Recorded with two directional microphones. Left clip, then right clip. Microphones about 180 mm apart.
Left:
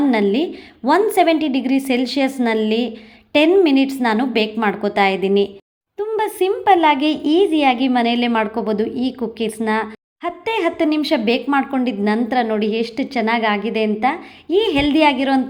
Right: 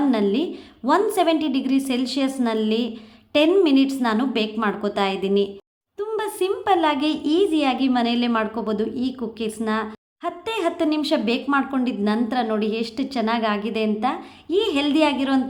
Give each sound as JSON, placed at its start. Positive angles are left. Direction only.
{"t": 0.1, "sound": "speech", "side_deg": 15}